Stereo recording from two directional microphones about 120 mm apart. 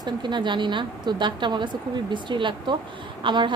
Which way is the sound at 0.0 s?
40° right (ahead or behind).